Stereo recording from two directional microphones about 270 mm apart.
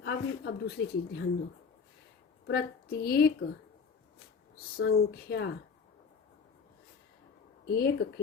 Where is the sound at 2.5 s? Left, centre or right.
Left.